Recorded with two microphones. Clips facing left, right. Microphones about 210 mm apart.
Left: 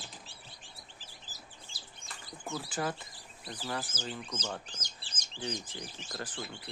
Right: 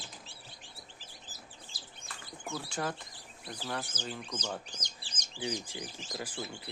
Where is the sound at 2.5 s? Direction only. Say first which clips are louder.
Left 1 dB; 5° left (ahead or behind).